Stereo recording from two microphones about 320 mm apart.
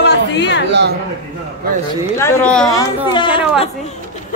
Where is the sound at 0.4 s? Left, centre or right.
Left.